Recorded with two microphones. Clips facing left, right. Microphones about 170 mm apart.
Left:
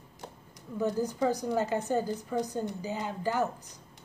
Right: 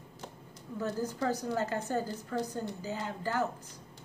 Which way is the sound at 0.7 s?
15° left (ahead or behind).